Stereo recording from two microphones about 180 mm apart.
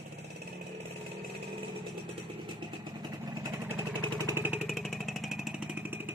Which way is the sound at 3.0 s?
20° right (ahead or behind).